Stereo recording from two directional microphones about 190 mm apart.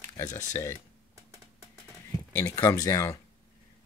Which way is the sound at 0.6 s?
15° left (ahead or behind).